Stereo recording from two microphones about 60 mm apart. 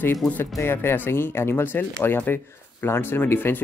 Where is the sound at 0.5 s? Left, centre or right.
Left.